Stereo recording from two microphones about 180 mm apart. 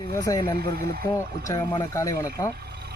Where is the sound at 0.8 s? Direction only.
55° right (ahead or behind).